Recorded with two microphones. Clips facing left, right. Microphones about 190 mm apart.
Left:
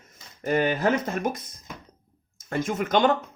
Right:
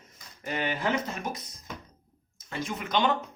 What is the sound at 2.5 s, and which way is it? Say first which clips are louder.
Speech: left 7 dB; 50° left (ahead or behind).